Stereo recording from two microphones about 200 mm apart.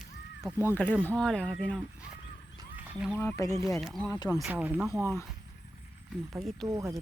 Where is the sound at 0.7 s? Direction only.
5° left (ahead or behind).